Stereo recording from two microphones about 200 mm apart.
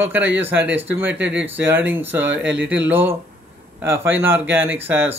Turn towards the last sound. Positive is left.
turn(degrees=-10)  # may be behind; listen again after turning